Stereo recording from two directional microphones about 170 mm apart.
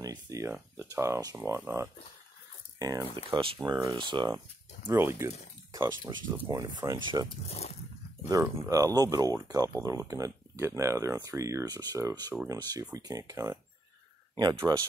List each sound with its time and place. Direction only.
0.0 s speech: 20° right (ahead or behind)
4.8 s speech: 15° right (ahead or behind)
7.4 s speech: 35° left (ahead or behind)
8.3 s speech: 20° right (ahead or behind)